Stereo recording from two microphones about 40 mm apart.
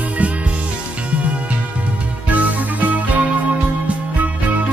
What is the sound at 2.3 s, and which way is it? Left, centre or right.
Music, right.